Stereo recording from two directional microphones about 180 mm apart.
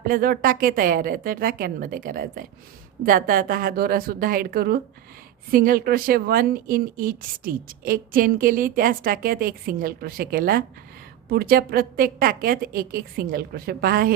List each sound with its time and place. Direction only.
0.1 s a woman's voice: 50° right (ahead or behind)